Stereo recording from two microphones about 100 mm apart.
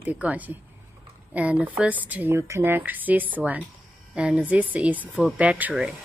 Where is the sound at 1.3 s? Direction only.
15° right (ahead or behind).